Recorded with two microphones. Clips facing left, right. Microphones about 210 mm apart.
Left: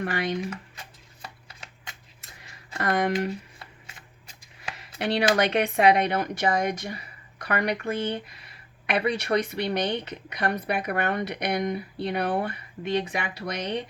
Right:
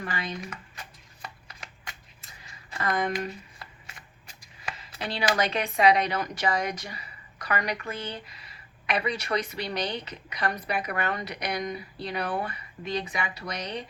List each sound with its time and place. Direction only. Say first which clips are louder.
0.0 s speech: left 6 dB; 65° left (ahead or behind)
2.7 s speech: left 3 dB; 65° left (ahead or behind)
4.8 s a woman's voice: left 7 dB; 65° left (ahead or behind)